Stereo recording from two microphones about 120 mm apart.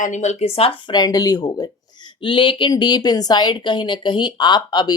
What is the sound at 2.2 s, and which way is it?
A woman's voice, 45° left (ahead or behind).